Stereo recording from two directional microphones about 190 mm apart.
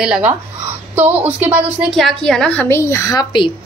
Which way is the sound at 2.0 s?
5° left (ahead or behind).